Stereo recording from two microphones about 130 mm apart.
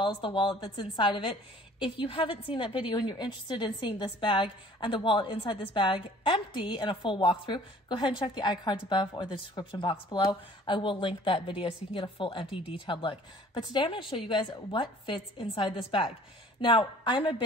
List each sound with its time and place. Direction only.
0.0 s a woman's voice: 40° left (ahead or behind)